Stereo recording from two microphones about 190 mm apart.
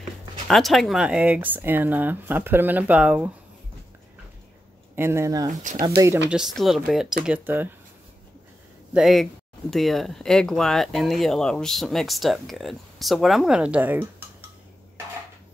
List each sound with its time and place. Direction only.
0.5 s speech: centre (ahead or behind)
4.9 s speech: 15° right (ahead or behind)
5.5 s speech: 40° right (ahead or behind)
5.8 s speech: 15° right (ahead or behind)
6.3 s speech: centre (ahead or behind)
8.9 s speech: centre (ahead or behind)